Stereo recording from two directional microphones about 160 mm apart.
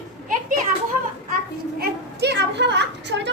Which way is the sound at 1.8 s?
90° right.